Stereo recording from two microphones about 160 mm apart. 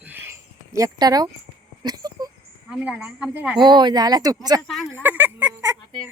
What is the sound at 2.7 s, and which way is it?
Speech, 5° right (ahead or behind).